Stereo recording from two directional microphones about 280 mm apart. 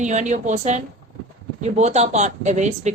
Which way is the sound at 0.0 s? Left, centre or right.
Right.